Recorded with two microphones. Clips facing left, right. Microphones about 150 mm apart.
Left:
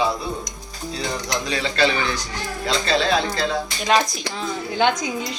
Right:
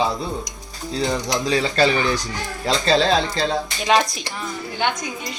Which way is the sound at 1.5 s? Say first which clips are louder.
Right 3 dB; 40° right (ahead or behind).